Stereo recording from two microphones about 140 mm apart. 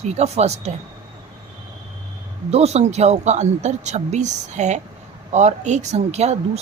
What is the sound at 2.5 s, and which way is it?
Speech, 50° right (ahead or behind).